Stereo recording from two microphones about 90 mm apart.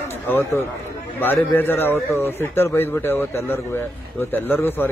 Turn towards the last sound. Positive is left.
turn(degrees=25)  # may be behind; listen again after turning